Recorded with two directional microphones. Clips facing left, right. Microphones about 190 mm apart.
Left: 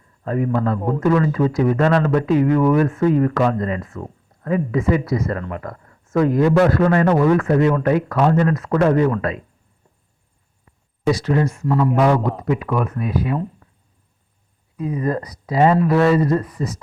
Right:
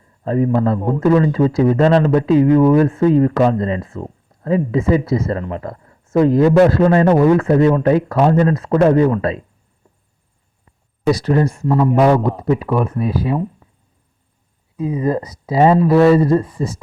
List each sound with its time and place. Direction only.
0.3 s a man's voice: 30° right (ahead or behind)
11.1 s speech: 35° right (ahead or behind)
14.8 s a man's voice: 25° right (ahead or behind)